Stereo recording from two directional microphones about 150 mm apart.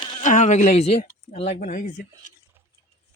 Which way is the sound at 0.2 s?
55° left (ahead or behind).